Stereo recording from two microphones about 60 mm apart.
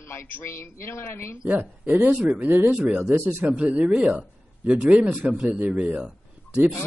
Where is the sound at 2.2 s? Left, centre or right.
Right.